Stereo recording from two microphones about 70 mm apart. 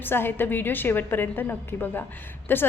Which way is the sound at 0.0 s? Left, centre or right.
Left.